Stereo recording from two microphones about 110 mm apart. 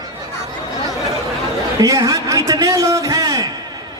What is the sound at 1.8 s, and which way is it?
Music, 30° right (ahead or behind).